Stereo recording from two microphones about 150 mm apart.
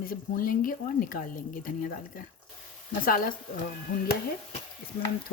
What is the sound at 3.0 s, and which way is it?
Speech, 70° left (ahead or behind).